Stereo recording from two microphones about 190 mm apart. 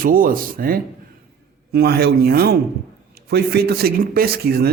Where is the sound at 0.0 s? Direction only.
45° right (ahead or behind).